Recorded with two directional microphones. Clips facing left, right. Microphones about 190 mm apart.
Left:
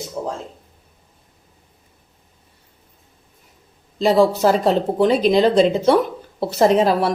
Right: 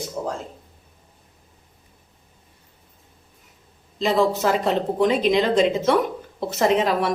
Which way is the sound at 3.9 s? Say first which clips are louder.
Left 5 dB; 40° left (ahead or behind).